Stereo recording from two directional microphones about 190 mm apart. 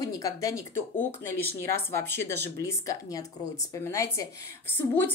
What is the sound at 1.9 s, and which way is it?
Speech, 60° right (ahead or behind).